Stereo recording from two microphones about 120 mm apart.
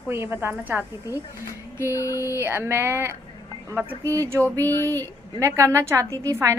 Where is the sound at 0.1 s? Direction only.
20° right (ahead or behind).